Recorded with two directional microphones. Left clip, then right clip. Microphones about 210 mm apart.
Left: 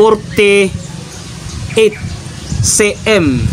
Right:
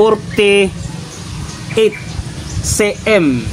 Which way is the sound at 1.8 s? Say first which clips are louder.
Left 2 dB; 25° left (ahead or behind).